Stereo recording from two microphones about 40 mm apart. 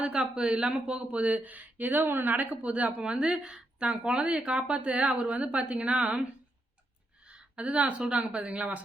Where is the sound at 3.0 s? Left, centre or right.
Right.